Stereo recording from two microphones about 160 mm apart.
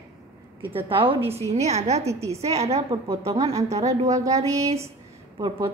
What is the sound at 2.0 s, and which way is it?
Speech, 20° right (ahead or behind).